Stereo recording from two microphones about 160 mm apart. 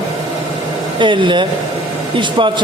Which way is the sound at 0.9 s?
30° right (ahead or behind).